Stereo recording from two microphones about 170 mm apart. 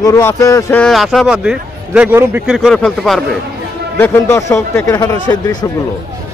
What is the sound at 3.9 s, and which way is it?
A man's voice, 15° left (ahead or behind).